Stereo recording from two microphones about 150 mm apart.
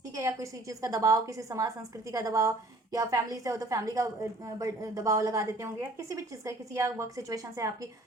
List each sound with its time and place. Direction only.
0.2 s a woman's voice: 20° right (ahead or behind)